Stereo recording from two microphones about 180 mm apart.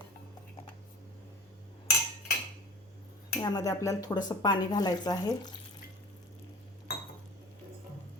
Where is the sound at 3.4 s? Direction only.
20° left (ahead or behind).